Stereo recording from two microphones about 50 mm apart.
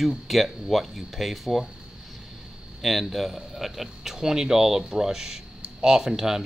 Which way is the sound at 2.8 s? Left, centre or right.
Centre.